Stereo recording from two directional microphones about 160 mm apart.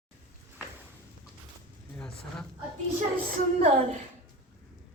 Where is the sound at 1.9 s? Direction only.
5° left (ahead or behind).